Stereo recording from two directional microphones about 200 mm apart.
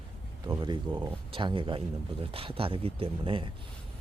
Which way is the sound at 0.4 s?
20° right (ahead or behind).